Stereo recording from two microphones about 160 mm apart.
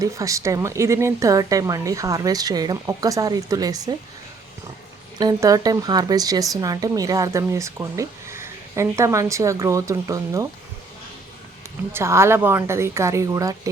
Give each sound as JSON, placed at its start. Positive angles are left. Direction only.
{"t": 0.0, "sound": "speech", "side_deg": -20}
{"t": 5.1, "sound": "speech", "side_deg": -25}
{"t": 11.9, "sound": "a woman's voice", "side_deg": -15}